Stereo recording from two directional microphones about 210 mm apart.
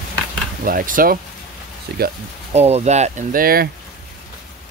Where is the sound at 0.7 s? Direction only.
40° right (ahead or behind).